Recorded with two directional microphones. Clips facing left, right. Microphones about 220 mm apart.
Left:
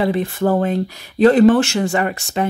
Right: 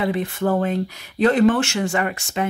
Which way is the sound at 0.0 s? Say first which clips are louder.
Left 4 dB; 35° left (ahead or behind).